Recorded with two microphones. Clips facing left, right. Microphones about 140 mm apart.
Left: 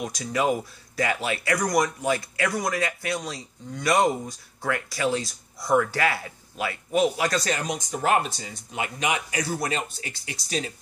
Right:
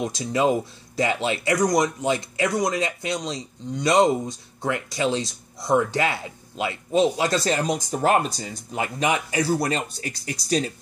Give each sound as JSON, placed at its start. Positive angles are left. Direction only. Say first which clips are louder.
{"t": 0.0, "sound": "speech", "louder": "right 3 dB", "side_deg": -25}